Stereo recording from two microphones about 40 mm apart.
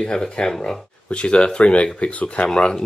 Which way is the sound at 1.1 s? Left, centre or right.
Left.